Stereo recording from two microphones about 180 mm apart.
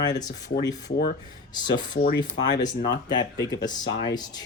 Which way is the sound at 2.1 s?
85° left.